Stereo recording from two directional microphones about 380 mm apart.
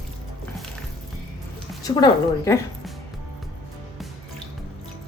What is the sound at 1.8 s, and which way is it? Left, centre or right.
Speech, centre.